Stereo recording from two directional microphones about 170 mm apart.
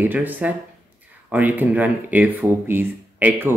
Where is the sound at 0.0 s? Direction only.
10° right (ahead or behind).